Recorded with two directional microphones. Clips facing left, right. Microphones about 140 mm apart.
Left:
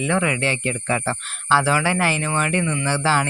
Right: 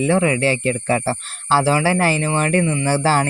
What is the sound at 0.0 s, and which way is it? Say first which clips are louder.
Speech: right 5 dB; 35° right (ahead or behind).